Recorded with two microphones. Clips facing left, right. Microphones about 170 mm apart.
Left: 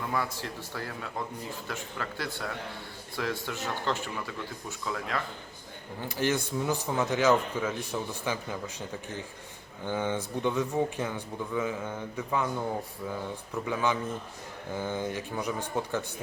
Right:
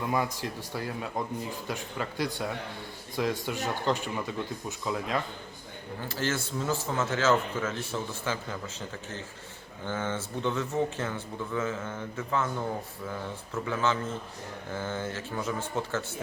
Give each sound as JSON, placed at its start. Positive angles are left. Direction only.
{"t": 0.1, "sound": "speech", "side_deg": -15}
{"t": 6.0, "sound": "a man's voice", "side_deg": 15}
{"t": 9.8, "sound": "a man's voice", "side_deg": 15}
{"t": 13.5, "sound": "a man's voice", "side_deg": 15}